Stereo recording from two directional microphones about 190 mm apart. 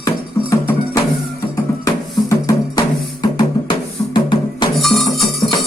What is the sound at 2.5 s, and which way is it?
Music, 20° left (ahead or behind).